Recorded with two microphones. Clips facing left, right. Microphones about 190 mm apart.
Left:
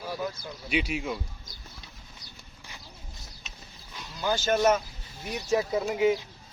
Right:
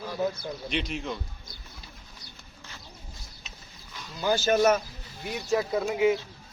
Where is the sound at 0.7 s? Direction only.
10° left (ahead or behind).